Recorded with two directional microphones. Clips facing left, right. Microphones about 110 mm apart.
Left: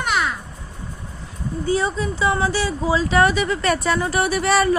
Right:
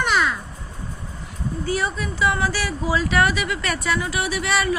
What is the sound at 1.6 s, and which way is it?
Speech, 25° left (ahead or behind).